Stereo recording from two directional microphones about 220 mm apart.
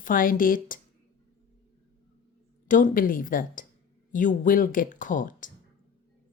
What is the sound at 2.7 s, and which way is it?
A woman's voice, 35° left (ahead or behind).